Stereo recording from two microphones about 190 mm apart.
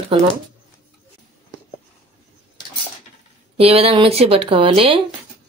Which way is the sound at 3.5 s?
30° right (ahead or behind).